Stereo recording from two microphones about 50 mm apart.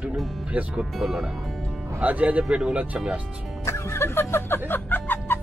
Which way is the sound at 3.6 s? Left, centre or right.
Left.